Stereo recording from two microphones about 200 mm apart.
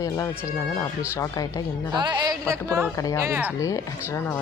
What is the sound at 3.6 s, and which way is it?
Speech, 15° left (ahead or behind).